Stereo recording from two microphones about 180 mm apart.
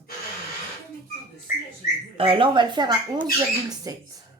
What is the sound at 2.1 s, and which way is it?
Speech, 30° right (ahead or behind).